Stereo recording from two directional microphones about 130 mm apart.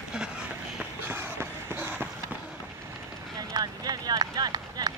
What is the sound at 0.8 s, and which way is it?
Run, 15° right (ahead or behind).